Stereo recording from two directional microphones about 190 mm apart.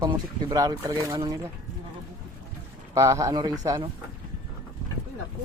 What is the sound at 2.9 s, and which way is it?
Speech, 15° right (ahead or behind).